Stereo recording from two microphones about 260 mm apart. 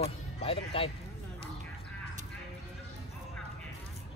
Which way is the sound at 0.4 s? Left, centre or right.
Left.